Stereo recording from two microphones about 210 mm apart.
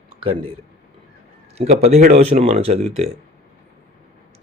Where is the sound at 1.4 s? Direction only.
30° right (ahead or behind).